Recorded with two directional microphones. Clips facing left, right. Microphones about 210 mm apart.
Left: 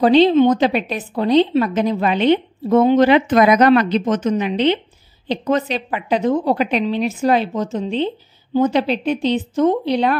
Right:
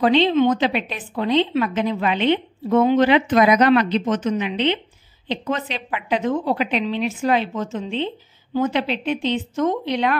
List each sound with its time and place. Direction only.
0.0 s a woman's voice: 35° left (ahead or behind)